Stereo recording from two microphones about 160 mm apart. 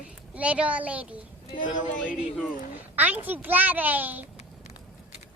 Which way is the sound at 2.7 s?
10° right (ahead or behind).